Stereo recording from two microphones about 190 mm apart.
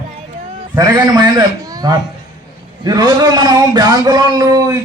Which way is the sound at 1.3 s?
20° right (ahead or behind).